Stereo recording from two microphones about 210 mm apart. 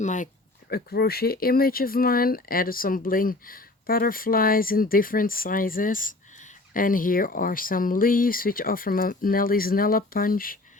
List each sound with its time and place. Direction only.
0.0 s speech: 35° left (ahead or behind)
0.7 s speech: 45° left (ahead or behind)